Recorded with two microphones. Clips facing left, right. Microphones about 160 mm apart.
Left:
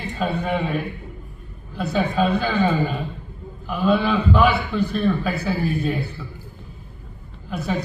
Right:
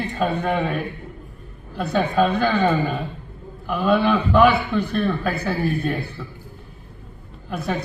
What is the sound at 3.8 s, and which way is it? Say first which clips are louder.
Speech: even; 55° right (ahead or behind).